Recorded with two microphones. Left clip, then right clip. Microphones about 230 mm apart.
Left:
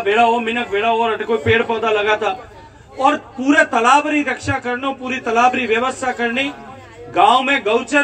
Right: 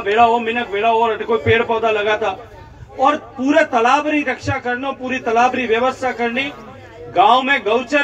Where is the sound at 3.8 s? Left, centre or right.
Left.